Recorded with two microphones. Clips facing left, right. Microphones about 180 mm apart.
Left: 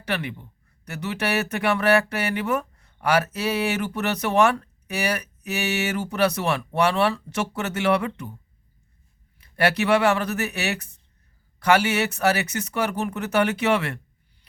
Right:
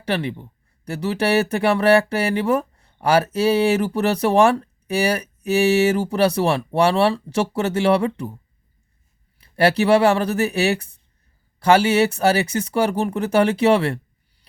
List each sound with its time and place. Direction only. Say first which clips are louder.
0.0 s speech: right 5 dB; 30° right (ahead or behind)
9.4 s speech: right 5 dB; 30° right (ahead or behind)